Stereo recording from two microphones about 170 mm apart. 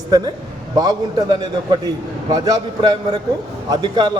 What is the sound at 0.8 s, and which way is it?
A man's voice, 25° right (ahead or behind).